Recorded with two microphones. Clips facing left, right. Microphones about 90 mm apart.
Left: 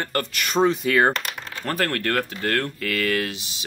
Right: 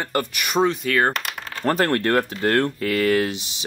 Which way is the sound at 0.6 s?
Centre (ahead or behind).